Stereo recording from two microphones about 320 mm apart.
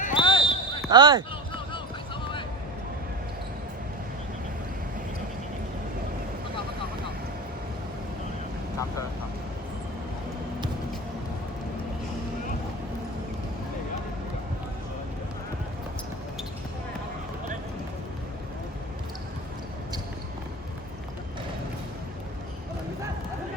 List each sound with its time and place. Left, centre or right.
0.0 s basketball bounce: centre
0.9 s speech: centre